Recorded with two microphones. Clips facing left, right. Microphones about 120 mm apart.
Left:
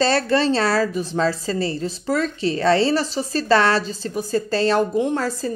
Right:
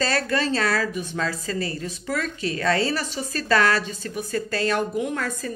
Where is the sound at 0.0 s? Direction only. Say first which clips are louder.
Left 6 dB; 30° left (ahead or behind).